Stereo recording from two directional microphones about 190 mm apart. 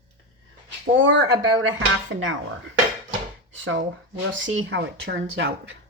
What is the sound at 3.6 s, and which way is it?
Speech, 90° right.